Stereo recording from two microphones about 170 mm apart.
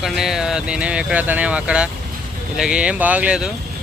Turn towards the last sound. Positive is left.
turn(degrees=-5)  # may be behind; listen again after turning